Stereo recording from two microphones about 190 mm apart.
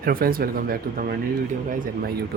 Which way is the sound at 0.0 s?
50° right (ahead or behind).